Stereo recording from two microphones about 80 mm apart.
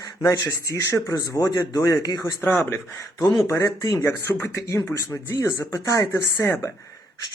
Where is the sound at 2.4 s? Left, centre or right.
Left.